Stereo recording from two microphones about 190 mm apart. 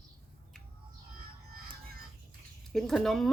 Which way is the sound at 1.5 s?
50° right (ahead or behind).